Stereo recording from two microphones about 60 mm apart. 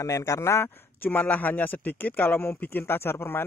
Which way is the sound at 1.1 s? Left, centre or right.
Left.